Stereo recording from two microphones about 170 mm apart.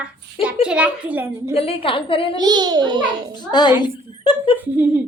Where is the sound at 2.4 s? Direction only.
25° right (ahead or behind).